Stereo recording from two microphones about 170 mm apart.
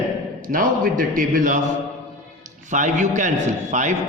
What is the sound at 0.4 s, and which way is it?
A man's voice, 55° right (ahead or behind).